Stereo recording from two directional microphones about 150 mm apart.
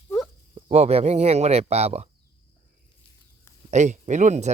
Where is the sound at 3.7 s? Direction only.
50° right (ahead or behind).